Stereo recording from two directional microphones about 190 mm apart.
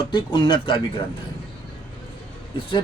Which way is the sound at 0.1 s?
25° left (ahead or behind).